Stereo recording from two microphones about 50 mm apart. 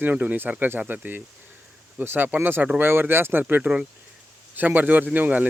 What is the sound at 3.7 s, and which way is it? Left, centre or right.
Speech, centre.